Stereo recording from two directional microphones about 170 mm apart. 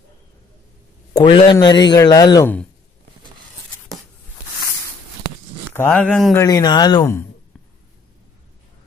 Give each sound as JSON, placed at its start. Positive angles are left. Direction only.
{"t": 1.2, "sound": "speech", "side_deg": 30}
{"t": 5.8, "sound": "speech", "side_deg": 5}
{"t": 6.3, "sound": "speech", "side_deg": 20}